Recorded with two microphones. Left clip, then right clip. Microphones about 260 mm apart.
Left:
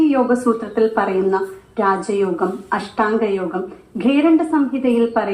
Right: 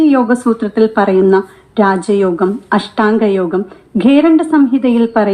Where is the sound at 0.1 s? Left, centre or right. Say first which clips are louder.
Right 4 dB; right.